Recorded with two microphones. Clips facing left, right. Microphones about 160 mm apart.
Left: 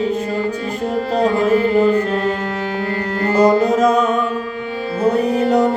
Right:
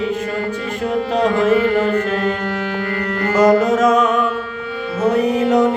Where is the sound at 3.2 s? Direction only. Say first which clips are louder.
Even; 30° left (ahead or behind).